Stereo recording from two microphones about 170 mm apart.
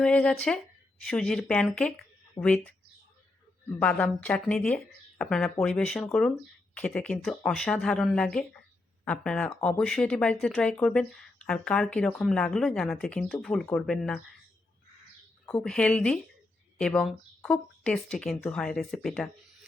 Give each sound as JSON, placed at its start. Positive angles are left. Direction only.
{"t": 0.0, "sound": "speech", "side_deg": 5}
{"t": 2.4, "sound": "speech", "side_deg": 25}
{"t": 3.7, "sound": "speech", "side_deg": 10}
{"t": 15.4, "sound": "speech", "side_deg": 5}